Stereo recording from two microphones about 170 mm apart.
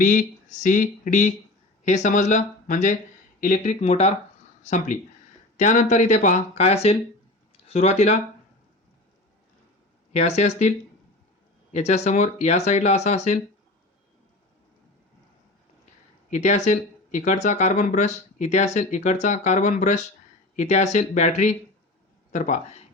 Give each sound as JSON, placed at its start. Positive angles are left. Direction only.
{"t": 0.0, "sound": "speech", "side_deg": 50}
{"t": 10.1, "sound": "speech", "side_deg": 40}
{"t": 16.3, "sound": "speech", "side_deg": 45}